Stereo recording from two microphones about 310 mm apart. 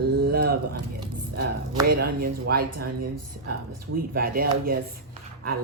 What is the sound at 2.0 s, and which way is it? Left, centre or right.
Speech, right.